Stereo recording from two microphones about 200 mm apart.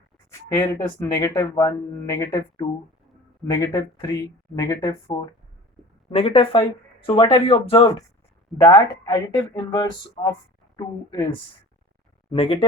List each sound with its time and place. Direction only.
0.8 s speech: 20° left (ahead or behind)
6.1 s speech: 30° left (ahead or behind)
12.3 s speech: 25° left (ahead or behind)